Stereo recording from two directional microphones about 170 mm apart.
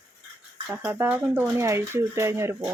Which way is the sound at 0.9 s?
10° right (ahead or behind).